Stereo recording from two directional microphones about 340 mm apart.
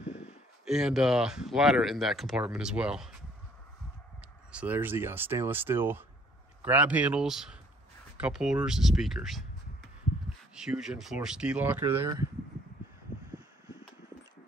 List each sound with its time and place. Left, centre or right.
0.0 s a sound: centre
0.7 s speech: centre
4.5 s speech: centre
10.5 s speech: centre